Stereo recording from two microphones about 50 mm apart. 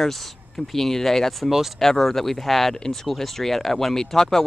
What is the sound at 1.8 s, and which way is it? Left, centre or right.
Speech, centre.